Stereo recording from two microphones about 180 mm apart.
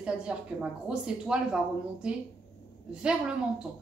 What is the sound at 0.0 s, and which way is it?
Speech, 5° right (ahead or behind).